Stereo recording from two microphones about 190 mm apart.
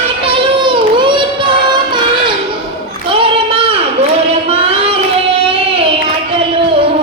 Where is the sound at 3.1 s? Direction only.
30° right (ahead or behind).